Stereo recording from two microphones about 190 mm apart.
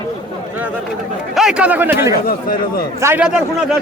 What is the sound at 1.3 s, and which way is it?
Speech, 5° right (ahead or behind).